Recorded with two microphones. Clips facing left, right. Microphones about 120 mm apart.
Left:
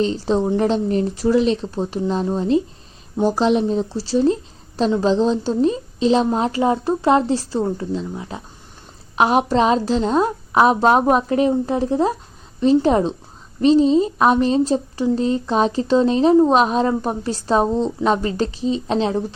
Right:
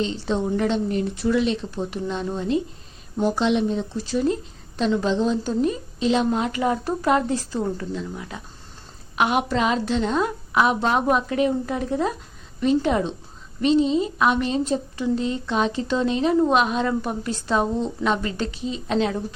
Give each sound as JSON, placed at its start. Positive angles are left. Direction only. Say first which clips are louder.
{"t": 0.0, "sound": "a woman's voice", "louder": "left 5 dB", "side_deg": 35}